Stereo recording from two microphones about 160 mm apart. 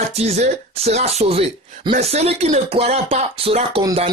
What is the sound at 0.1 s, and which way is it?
Speech, 40° right (ahead or behind).